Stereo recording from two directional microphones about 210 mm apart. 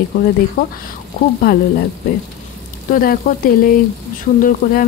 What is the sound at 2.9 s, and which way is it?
Speech, 45° left (ahead or behind).